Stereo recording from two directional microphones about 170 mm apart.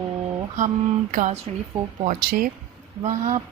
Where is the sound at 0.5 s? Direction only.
50° right (ahead or behind).